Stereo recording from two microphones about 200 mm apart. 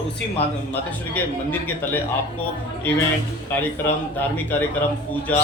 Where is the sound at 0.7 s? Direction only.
10° left (ahead or behind).